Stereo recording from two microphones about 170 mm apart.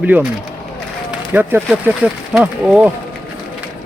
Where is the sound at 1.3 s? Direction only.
10° right (ahead or behind).